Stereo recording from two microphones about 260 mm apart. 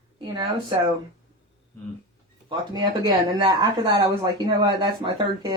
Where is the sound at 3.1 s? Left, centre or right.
Centre.